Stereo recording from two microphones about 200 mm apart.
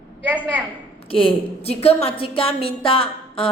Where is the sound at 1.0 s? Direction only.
25° left (ahead or behind).